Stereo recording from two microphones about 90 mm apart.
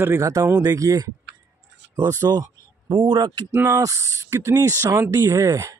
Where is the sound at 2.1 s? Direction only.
40° right (ahead or behind).